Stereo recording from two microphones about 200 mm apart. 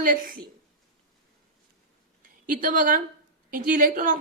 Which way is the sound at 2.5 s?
45° right (ahead or behind).